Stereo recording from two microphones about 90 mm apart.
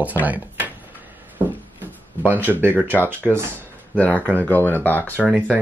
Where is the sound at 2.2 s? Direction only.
20° right (ahead or behind).